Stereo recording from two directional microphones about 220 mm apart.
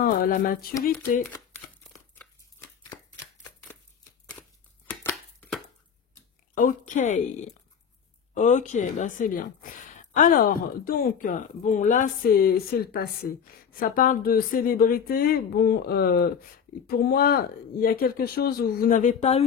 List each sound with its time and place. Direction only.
0.0 s speech: 40° left (ahead or behind)
1.5 s a sound: 10° left (ahead or behind)
4.8 s chopping: 5° left (ahead or behind)
6.5 s a woman's voice: 35° left (ahead or behind)